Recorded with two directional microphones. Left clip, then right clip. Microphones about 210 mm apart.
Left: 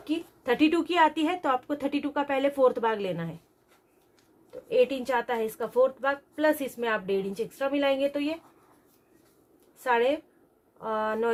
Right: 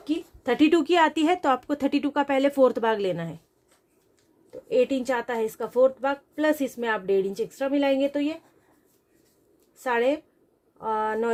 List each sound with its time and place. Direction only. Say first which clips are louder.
0.0 s a woman's voice: right 3 dB; 35° right (ahead or behind)
4.7 s a woman's voice: right 1 dB; 35° right (ahead or behind)
9.8 s a woman's voice: right 1 dB; 35° right (ahead or behind)